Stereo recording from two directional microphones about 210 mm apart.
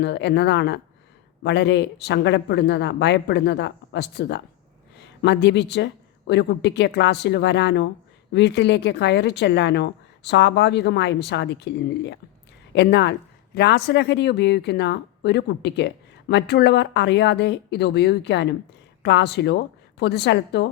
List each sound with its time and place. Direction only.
0.0 s speech: 55° left (ahead or behind)